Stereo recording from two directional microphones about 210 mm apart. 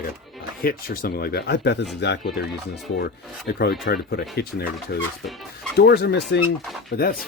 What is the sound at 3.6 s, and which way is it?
Speech, 50° left (ahead or behind).